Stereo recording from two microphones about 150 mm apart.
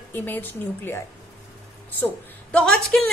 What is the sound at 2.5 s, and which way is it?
Speech, 5° left (ahead or behind).